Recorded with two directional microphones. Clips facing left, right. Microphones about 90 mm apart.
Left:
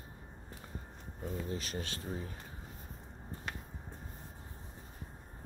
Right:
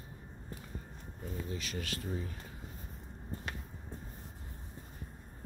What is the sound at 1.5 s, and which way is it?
Speech, 35° left (ahead or behind).